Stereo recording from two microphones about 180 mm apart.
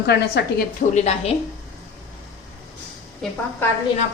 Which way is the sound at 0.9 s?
40° left (ahead or behind).